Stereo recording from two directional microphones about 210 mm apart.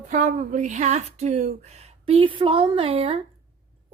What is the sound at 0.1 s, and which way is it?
A woman's voice, 40° right (ahead or behind).